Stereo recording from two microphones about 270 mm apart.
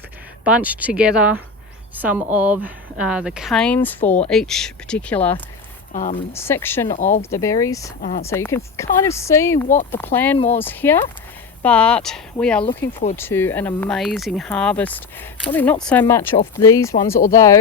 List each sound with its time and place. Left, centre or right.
0.4 s speech: centre
5.9 s speech: left
6.3 s speech: centre
6.9 s speech: left
7.2 s speech: centre
10.3 s speech: left
10.6 s speech: centre